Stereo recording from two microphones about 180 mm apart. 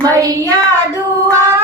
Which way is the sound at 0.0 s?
20° right (ahead or behind).